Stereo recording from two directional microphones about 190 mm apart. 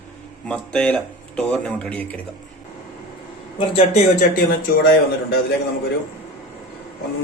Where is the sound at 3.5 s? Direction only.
35° left (ahead or behind).